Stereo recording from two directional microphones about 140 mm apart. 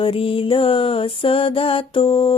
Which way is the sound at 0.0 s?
40° left (ahead or behind).